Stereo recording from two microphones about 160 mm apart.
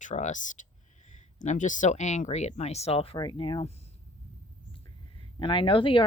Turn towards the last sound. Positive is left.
turn(degrees=30)  # may be behind; listen again after turning